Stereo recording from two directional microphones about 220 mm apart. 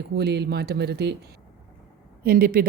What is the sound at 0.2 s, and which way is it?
Speech, 50° right (ahead or behind).